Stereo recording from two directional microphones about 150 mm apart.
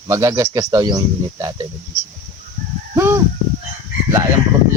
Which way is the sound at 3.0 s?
15° right (ahead or behind).